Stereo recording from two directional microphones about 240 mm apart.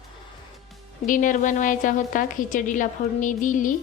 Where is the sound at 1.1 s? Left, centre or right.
Left.